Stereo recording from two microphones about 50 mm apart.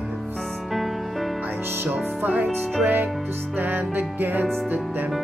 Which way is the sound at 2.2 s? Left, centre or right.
Right.